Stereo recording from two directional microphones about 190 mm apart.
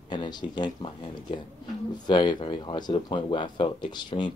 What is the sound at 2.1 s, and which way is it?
Speech, 25° left (ahead or behind).